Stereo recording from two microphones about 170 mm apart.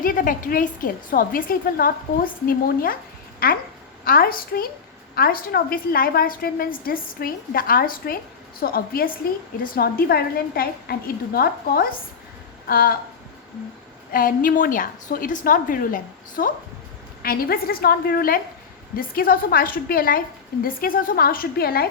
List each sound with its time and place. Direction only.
0.0 s a woman's voice: 55° left (ahead or behind)
4.0 s a woman's voice: 60° left (ahead or behind)
14.1 s a woman's voice: 55° left (ahead or behind)